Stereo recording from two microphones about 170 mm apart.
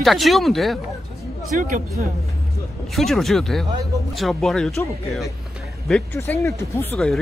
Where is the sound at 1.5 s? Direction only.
50° right (ahead or behind).